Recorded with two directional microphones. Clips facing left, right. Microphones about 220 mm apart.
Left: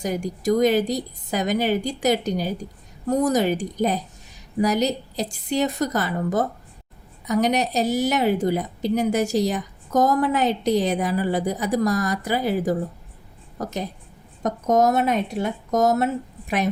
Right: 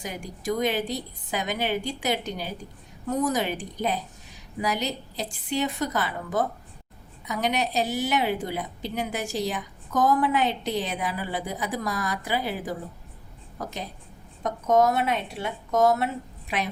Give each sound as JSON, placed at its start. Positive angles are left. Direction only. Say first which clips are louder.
{"t": 0.0, "sound": "a woman's voice", "louder": "left 8 dB", "side_deg": 40}